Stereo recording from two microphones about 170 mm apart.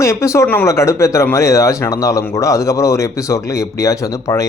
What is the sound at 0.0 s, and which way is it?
Speech, 15° left (ahead or behind).